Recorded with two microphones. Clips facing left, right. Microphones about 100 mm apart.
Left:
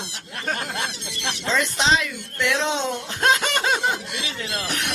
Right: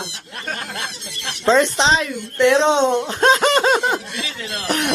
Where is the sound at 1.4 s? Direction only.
35° right (ahead or behind).